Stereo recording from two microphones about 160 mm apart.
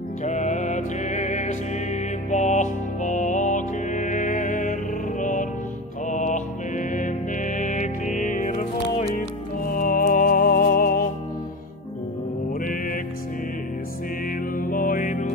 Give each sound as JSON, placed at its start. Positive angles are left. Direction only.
{"t": 0.2, "sound": "music", "side_deg": 50}
{"t": 9.7, "sound": "music", "side_deg": 60}
{"t": 12.6, "sound": "music", "side_deg": 60}
{"t": 14.6, "sound": "music", "side_deg": 60}